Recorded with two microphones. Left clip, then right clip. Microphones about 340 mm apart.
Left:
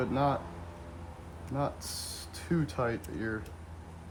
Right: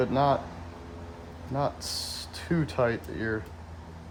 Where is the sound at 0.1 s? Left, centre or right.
Centre.